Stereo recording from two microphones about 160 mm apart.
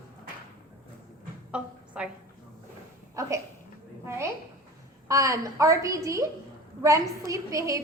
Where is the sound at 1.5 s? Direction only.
5° right (ahead or behind).